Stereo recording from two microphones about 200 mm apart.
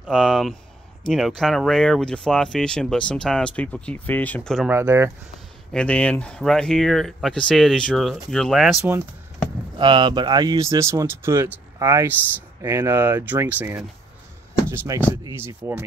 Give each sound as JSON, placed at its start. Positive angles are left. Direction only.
{"t": 0.0, "sound": "speech", "side_deg": 0}
{"t": 4.6, "sound": "speech", "side_deg": -15}
{"t": 5.7, "sound": "speech", "side_deg": 5}
{"t": 9.8, "sound": "speech", "side_deg": -25}
{"t": 14.9, "sound": "speech", "side_deg": -15}